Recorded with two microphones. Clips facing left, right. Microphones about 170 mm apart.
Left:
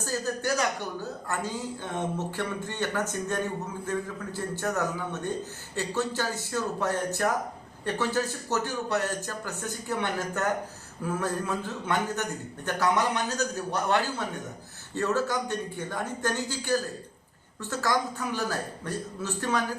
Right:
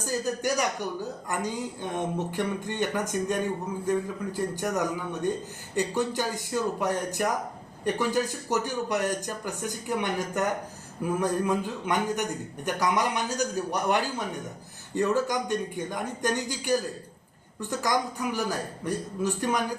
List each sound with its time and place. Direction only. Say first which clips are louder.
0.0 s speech: right 2 dB; 15° right (ahead or behind)